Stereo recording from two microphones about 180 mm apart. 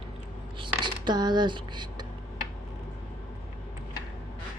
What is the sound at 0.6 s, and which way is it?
Writing, 25° right (ahead or behind).